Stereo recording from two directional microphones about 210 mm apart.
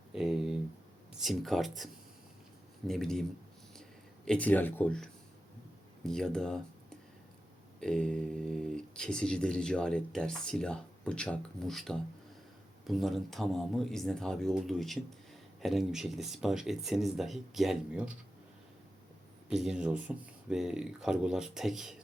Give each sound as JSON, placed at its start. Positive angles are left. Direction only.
{"t": 0.1, "sound": "a sound", "side_deg": 0}
{"t": 1.1, "sound": "speech", "side_deg": 0}
{"t": 4.3, "sound": "speech", "side_deg": 5}
{"t": 6.1, "sound": "speech", "side_deg": 0}
{"t": 7.8, "sound": "speech", "side_deg": 5}
{"t": 19.5, "sound": "speech", "side_deg": 0}